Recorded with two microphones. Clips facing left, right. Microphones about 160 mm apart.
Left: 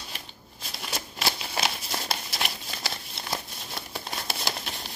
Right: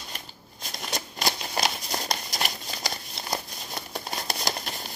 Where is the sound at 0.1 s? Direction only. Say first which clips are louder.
Right 1 dB; 5° left (ahead or behind).